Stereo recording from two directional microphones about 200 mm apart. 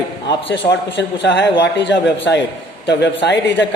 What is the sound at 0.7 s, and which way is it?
Speech, 60° left (ahead or behind).